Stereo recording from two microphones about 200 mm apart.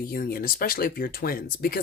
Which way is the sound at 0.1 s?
45° left (ahead or behind).